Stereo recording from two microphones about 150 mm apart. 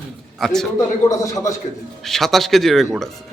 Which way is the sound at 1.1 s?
20° left (ahead or behind).